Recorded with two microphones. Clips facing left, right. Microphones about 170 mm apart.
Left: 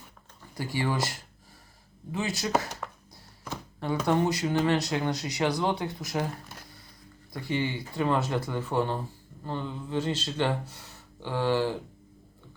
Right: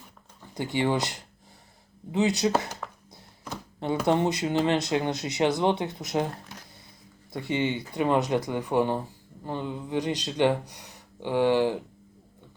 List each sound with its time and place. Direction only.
0.5 s speech: 20° right (ahead or behind)
2.8 s a sound: centre (ahead or behind)
4.0 s speech: 20° right (ahead or behind)
7.3 s speech: 20° right (ahead or behind)